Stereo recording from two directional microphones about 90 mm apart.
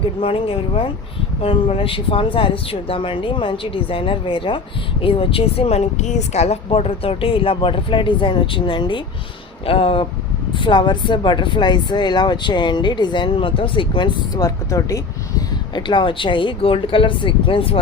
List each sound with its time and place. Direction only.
0.0 s speech: 85° left
6.7 s speech: 90° left; by 9.0 s 65° left (ahead or behind)
9.6 s speech: 90° left
10.5 s speech: 65° left (ahead or behind)
14.3 s speech: 40° left (ahead or behind)
15.7 s speech: 65° left (ahead or behind); by 17.7 s 85° left